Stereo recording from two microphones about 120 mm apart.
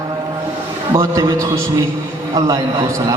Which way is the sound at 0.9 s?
30° right (ahead or behind).